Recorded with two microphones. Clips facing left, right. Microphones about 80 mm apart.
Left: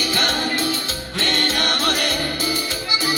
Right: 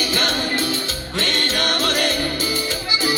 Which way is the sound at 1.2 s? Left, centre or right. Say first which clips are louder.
Left 1 dB; left.